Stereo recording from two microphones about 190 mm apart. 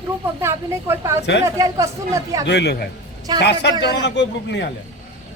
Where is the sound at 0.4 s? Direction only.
15° right (ahead or behind).